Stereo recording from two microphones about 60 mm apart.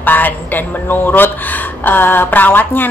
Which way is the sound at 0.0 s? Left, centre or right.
Left.